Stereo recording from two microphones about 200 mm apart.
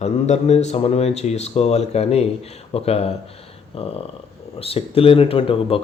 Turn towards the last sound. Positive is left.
turn(degrees=30)  # may be behind; listen again after turning